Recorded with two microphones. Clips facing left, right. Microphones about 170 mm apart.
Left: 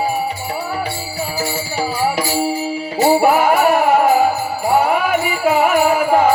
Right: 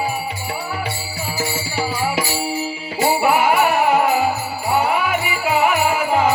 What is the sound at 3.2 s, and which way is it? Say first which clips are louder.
Music: left 3 dB; 45° left (ahead or behind).